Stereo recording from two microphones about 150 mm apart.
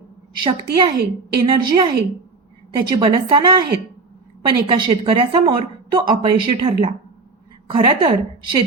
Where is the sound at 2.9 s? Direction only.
30° right (ahead or behind).